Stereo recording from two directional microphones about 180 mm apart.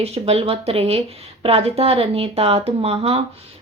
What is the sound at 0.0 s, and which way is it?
Speech, 35° right (ahead or behind).